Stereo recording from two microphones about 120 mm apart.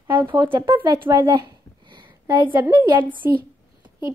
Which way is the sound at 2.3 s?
40° right (ahead or behind).